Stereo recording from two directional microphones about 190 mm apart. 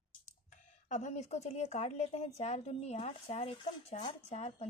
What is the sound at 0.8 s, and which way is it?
Speech, 40° left (ahead or behind).